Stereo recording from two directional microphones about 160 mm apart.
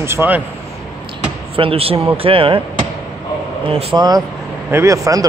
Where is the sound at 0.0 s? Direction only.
15° right (ahead or behind).